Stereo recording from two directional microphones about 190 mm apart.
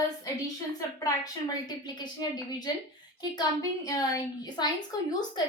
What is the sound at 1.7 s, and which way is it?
A woman's voice, 20° left (ahead or behind).